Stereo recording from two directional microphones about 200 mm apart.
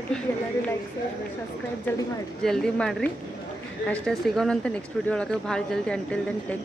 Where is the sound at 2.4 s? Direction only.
Centre (ahead or behind).